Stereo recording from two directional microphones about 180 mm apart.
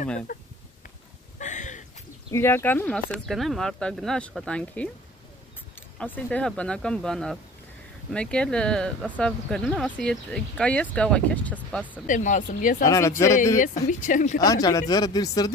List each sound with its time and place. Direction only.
0.3 s speech: 45° left (ahead or behind)
1.4 s a sound: 45° left (ahead or behind)
2.3 s speech: 15° left (ahead or behind)
5.9 s speech: 10° left (ahead or behind)
12.1 s speech: 45° left (ahead or behind)
12.8 s speech: 20° left (ahead or behind)
13.6 s speech: 45° left (ahead or behind)
14.4 s speech: 20° left (ahead or behind)